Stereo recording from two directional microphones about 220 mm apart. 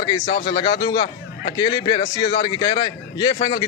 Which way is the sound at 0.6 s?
20° left (ahead or behind).